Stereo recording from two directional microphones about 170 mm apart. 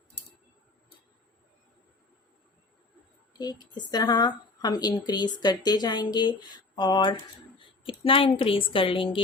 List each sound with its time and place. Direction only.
3.3 s a woman's voice: 25° left (ahead or behind)